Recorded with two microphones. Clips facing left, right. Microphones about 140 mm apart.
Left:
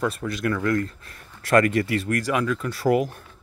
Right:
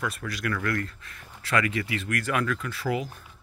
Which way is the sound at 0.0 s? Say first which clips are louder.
Left 6 dB; 25° left (ahead or behind).